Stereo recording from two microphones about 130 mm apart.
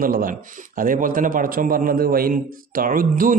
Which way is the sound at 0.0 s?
90° right.